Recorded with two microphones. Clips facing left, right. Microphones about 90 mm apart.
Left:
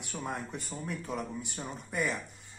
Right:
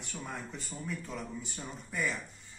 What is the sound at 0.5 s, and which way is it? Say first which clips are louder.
Speech: left 2 dB; 60° left (ahead or behind).